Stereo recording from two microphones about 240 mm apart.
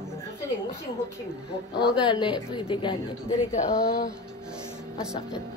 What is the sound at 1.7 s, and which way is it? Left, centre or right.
Speech, centre.